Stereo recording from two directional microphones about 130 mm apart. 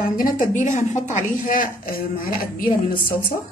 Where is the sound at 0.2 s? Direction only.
90° left.